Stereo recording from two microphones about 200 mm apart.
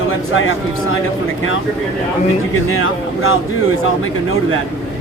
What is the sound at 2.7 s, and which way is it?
Speech, 90° left.